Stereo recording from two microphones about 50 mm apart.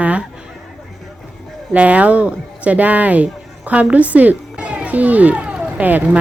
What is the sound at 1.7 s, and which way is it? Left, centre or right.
Speech, right.